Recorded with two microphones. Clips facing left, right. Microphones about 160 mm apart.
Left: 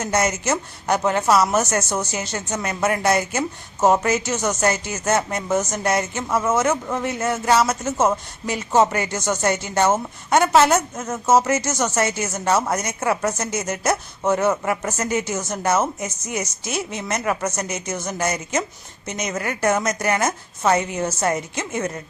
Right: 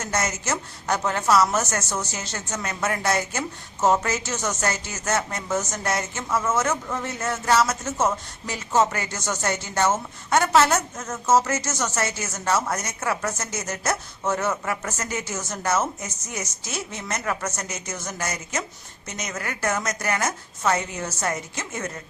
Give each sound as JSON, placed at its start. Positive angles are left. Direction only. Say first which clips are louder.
{"t": 0.1, "sound": "a woman's voice", "louder": "left 5 dB", "side_deg": 15}